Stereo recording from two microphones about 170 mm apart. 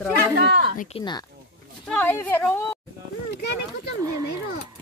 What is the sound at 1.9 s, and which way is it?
Speech, 10° left (ahead or behind).